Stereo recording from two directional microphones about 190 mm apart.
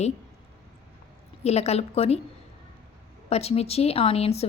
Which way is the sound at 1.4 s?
35° left (ahead or behind).